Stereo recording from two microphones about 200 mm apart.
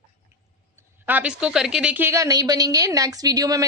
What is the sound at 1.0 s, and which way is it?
A woman's voice, 5° right (ahead or behind).